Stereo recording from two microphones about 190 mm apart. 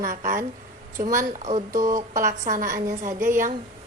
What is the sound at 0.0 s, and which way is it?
A woman's voice, 45° right (ahead or behind).